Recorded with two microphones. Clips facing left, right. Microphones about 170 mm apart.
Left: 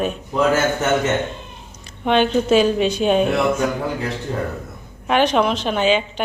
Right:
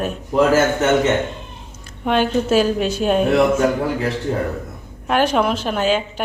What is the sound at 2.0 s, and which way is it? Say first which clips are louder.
A woman's voice: left 1 dB; 5° right (ahead or behind).